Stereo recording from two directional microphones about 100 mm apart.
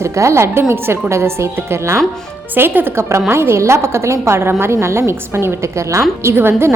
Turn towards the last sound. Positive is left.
turn(degrees=-25)  # may be behind; listen again after turning